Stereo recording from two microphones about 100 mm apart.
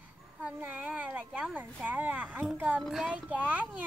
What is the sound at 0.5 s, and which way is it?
Speech, 15° right (ahead or behind).